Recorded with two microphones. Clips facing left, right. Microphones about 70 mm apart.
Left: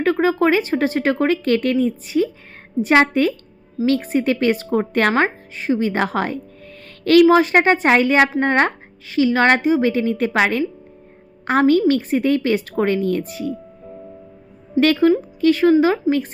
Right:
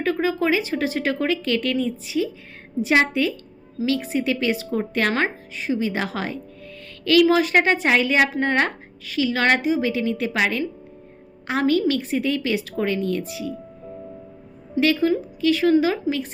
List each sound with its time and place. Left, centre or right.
0.0 s a woman's voice: left
11.6 s speech: left
14.8 s speech: left